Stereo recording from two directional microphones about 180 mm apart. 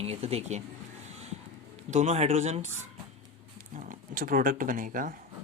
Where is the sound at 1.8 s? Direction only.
40° right (ahead or behind).